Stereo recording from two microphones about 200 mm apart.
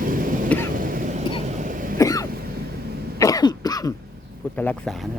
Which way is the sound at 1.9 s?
15° left (ahead or behind).